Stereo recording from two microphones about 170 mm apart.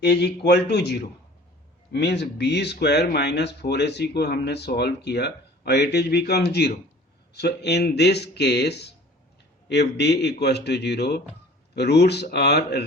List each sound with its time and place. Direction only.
0.0 s speech: 70° left (ahead or behind)